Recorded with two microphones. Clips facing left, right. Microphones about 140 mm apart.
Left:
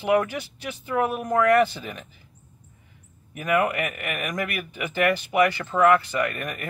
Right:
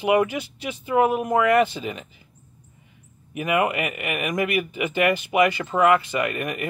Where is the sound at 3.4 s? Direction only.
15° right (ahead or behind).